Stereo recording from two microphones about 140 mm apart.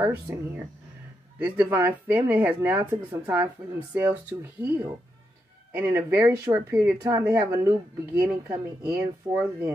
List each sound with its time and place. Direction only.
0.0 s speech: 15° right (ahead or behind)
1.4 s speech: 15° right (ahead or behind)
8.2 s speech: 5° right (ahead or behind)
9.3 s speech: 30° right (ahead or behind)